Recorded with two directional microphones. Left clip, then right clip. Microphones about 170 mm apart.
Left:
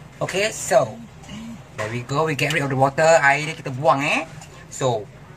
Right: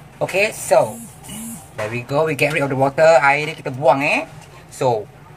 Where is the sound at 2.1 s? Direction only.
20° right (ahead or behind).